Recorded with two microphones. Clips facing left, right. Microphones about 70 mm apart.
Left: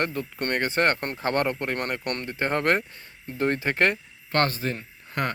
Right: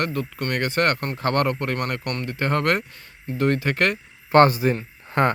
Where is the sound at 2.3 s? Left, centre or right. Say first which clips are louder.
Right 2 dB; left.